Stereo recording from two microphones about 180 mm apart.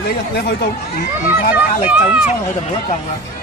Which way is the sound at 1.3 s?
10° right (ahead or behind).